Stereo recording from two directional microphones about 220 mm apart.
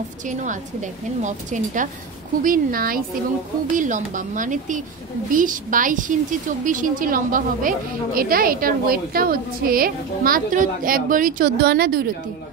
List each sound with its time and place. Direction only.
0.3 s a woman's voice: 35° right (ahead or behind)